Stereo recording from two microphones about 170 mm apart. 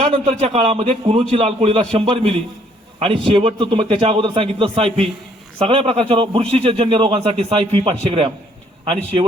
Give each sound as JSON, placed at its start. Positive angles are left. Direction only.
{"t": 0.0, "sound": "a man's voice", "side_deg": -35}